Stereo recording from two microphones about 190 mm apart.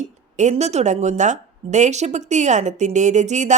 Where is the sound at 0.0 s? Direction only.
40° right (ahead or behind).